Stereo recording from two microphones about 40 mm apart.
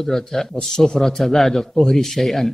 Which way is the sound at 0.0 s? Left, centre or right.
Centre.